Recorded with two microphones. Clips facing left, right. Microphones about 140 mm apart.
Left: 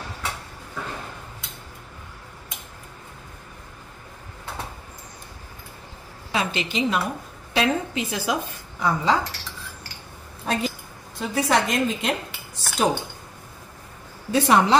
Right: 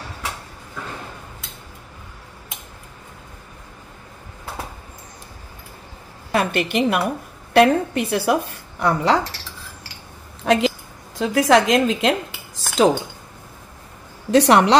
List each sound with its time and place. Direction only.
6.3 s a woman's voice: 60° right (ahead or behind)
10.4 s a woman's voice: 90° right
14.3 s speech: 75° right (ahead or behind)